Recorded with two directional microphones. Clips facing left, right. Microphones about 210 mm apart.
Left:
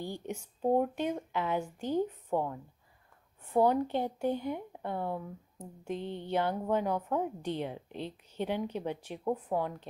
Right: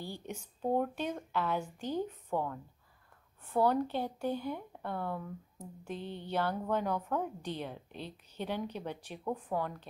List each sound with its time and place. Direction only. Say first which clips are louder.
0.0 s speech: left 4 dB; 15° left (ahead or behind)